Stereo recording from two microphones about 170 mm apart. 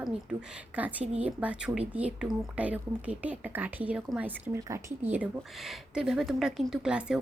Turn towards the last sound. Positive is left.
turn(degrees=-5)  # may be behind; listen again after turning